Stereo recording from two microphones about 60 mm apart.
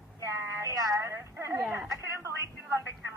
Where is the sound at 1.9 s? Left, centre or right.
Right.